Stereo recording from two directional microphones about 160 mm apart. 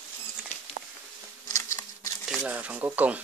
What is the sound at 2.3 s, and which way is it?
Speech, 5° right (ahead or behind).